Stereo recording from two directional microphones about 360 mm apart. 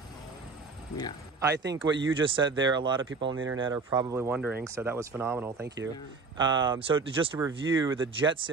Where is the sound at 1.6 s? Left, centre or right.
Right.